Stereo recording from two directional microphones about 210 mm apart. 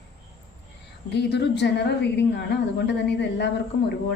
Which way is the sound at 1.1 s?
55° left (ahead or behind).